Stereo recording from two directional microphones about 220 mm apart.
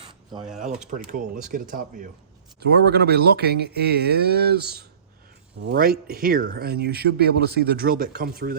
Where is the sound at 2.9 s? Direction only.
45° right (ahead or behind).